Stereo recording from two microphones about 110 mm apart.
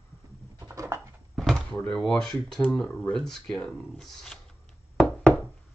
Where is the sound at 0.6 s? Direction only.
30° right (ahead or behind).